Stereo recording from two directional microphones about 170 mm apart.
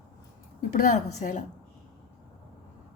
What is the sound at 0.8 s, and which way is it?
Speech, 50° left (ahead or behind).